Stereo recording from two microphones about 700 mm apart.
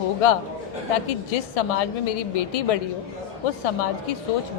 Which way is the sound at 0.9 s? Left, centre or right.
Left.